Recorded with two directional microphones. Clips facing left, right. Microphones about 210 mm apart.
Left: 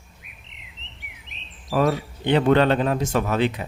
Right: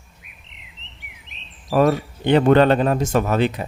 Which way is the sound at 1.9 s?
50° right (ahead or behind).